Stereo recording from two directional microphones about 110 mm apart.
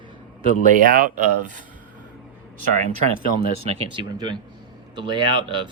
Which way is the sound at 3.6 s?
60° right (ahead or behind).